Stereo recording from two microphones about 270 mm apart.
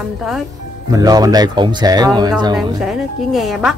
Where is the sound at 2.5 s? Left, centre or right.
Centre.